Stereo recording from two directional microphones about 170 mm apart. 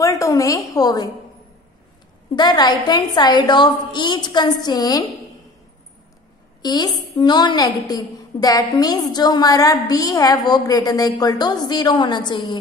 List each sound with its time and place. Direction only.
0.0 s a woman's voice: 20° left (ahead or behind)
2.3 s a woman's voice: 25° left (ahead or behind)
6.6 s a woman's voice: 25° left (ahead or behind)